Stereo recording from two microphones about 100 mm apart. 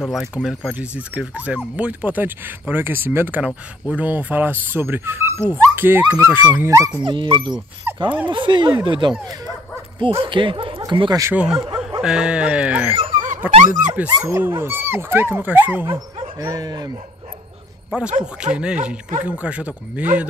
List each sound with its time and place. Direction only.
0.0 s speech: 5° right (ahead or behind); by 6.5 s 20° right (ahead or behind)
6.6 s speech: 30° right (ahead or behind)
7.0 s speech: 55° right (ahead or behind)
7.9 s dog: 20° right (ahead or behind)
8.3 s speech: 55° right (ahead or behind)
11.3 s speech: 10° right (ahead or behind)
12.9 s dog: 65° right (ahead or behind)
13.4 s dog: 15° right (ahead or behind)
14.2 s speech: 25° right (ahead or behind)
16.3 s speech: 40° right (ahead or behind)
17.9 s speech: 10° right (ahead or behind)